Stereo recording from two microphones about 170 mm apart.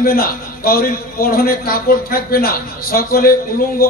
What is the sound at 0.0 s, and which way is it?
A man's voice, 60° left (ahead or behind).